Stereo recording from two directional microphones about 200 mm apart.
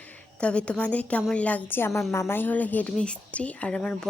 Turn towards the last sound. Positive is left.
turn(degrees=5)  # may be behind; listen again after turning